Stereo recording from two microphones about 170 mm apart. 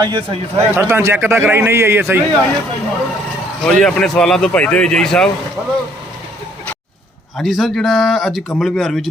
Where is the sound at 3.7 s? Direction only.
5° left (ahead or behind).